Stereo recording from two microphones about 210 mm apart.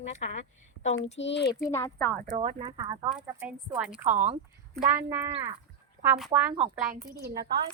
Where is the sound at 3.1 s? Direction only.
5° right (ahead or behind).